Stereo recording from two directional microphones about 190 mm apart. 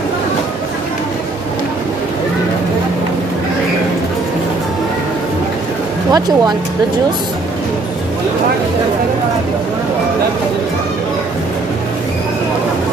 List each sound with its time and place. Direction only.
6.1 s speech: 20° right (ahead or behind)